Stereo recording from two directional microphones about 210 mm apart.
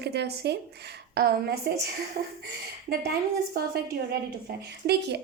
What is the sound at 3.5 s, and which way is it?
A woman's voice, 50° right (ahead or behind).